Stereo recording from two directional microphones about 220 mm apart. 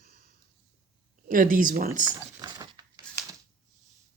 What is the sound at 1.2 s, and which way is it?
Speech, 40° right (ahead or behind).